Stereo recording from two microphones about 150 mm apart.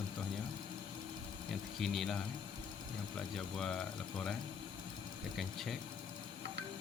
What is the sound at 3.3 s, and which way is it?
Speech, 5° left (ahead or behind).